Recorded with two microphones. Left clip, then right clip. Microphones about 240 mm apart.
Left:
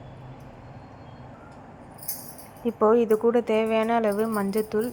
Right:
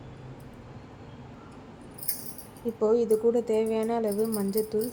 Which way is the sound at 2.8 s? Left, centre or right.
Centre.